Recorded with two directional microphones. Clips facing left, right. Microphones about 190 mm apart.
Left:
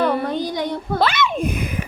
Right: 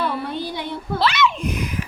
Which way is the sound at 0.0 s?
45° left (ahead or behind).